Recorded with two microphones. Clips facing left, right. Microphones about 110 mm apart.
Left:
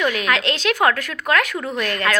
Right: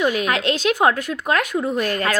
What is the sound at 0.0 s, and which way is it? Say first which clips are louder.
A woman's voice: right 1 dB; 35° right (ahead or behind).